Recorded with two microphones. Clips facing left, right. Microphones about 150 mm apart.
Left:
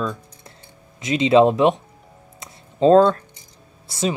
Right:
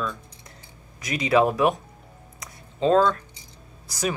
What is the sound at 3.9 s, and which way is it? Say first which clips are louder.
Speech: left 4 dB; 25° left (ahead or behind).